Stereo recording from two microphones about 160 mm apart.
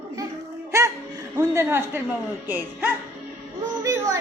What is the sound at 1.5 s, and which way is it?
A child's voice, 15° right (ahead or behind).